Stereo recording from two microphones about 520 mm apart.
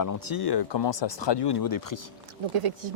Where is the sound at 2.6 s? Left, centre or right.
Right.